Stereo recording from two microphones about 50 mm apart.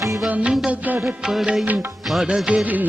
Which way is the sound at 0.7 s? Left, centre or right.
Right.